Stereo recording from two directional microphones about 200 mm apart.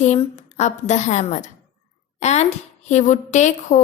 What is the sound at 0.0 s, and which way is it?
A woman's voice, 35° left (ahead or behind).